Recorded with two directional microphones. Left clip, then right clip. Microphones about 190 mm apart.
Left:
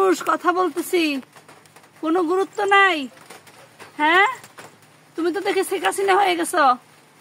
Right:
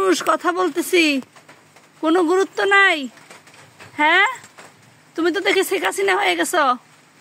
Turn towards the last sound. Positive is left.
turn(degrees=-35)  # may be behind; listen again after turning